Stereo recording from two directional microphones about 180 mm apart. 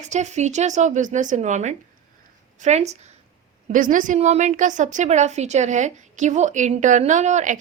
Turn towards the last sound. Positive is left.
turn(degrees=-40)  # may be behind; listen again after turning